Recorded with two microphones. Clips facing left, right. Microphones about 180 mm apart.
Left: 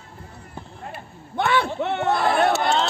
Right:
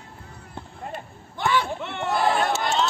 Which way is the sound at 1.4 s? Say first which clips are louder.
Left 3 dB; 60° left (ahead or behind).